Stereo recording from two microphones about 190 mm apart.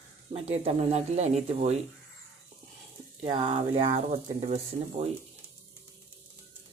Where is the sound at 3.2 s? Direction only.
25° right (ahead or behind).